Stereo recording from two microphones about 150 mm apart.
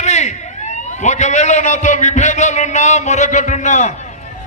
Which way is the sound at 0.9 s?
50° left (ahead or behind).